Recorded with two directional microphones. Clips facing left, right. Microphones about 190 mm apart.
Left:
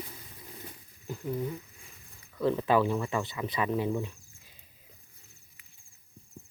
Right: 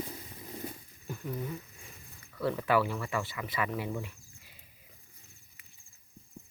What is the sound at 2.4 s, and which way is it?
Speech, 20° left (ahead or behind).